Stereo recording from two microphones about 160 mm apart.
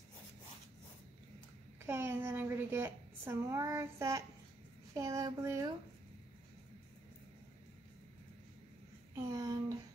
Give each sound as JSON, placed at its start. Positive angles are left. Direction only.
{"t": 1.8, "sound": "a woman's voice", "side_deg": -15}
{"t": 4.9, "sound": "child singing", "side_deg": -20}
{"t": 9.1, "sound": "a sound", "side_deg": -20}